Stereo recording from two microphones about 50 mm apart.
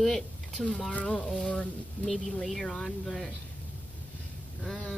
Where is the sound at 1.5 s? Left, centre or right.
Left.